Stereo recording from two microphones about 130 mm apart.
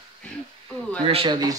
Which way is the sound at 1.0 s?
45° right (ahead or behind).